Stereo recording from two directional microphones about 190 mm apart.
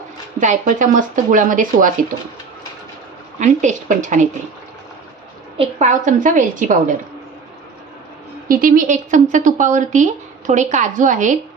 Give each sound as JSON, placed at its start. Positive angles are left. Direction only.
{"t": 0.3, "sound": "speech", "side_deg": -40}
{"t": 3.3, "sound": "a woman's voice", "side_deg": -40}
{"t": 5.5, "sound": "speech", "side_deg": -40}
{"t": 8.4, "sound": "a woman's voice", "side_deg": -50}